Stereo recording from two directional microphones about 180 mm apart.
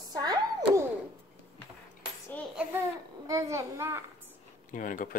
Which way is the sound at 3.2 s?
15° right (ahead or behind).